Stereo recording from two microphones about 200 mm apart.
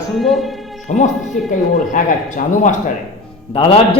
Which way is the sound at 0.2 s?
Centre (ahead or behind).